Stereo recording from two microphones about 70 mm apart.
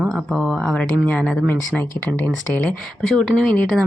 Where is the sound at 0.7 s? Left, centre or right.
Centre.